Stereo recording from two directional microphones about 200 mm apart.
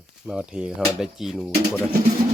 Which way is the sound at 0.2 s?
5° right (ahead or behind).